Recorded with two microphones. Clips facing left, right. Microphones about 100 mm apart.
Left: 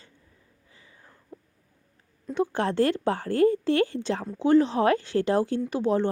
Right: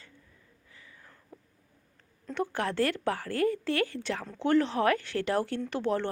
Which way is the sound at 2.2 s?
15° left (ahead or behind).